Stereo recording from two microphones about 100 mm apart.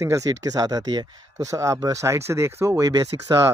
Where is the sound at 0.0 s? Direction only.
35° right (ahead or behind).